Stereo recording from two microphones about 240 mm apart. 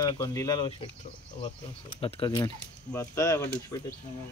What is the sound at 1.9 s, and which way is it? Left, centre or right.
Speech, centre.